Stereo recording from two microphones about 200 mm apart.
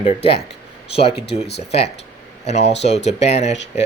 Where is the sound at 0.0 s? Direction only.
30° left (ahead or behind).